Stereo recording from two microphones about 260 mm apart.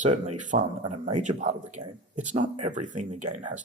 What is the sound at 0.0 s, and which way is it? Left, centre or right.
Speech, right.